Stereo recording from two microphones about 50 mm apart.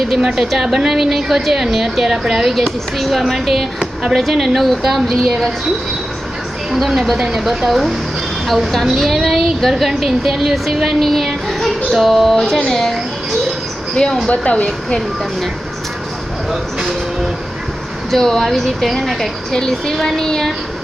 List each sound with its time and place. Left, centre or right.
0.1 s a woman's voice: centre
6.7 s a woman's voice: centre
13.9 s speech: centre
18.1 s a woman's voice: centre